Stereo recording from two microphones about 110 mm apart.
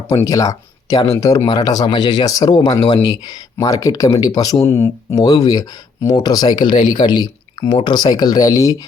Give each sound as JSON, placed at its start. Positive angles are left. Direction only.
{"t": 0.3, "sound": "speech", "side_deg": 30}